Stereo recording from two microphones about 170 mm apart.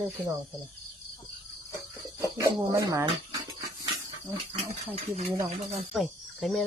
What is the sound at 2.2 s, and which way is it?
Speech, 20° right (ahead or behind).